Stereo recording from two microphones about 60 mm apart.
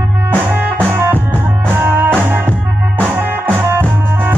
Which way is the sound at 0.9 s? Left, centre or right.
Right.